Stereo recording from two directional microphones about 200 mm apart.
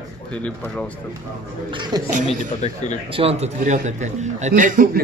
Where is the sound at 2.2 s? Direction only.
35° left (ahead or behind).